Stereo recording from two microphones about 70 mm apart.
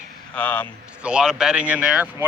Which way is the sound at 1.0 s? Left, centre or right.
Centre.